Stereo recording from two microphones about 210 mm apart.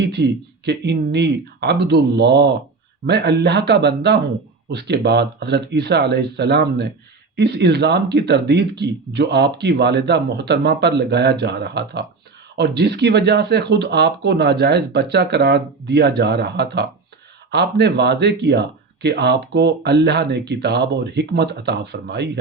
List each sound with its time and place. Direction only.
0.0 s speech: 55° right (ahead or behind)